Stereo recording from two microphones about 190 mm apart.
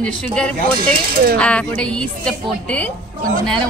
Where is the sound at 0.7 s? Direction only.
50° right (ahead or behind).